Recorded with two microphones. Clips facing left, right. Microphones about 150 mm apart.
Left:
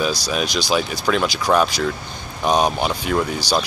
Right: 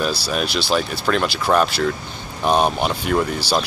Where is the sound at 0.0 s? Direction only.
Centre (ahead or behind).